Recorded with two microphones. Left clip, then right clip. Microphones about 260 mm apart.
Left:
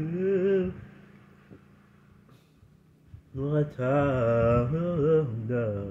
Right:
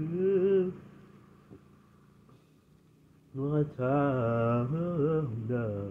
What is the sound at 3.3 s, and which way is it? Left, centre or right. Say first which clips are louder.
Mantra: left 2 dB; left.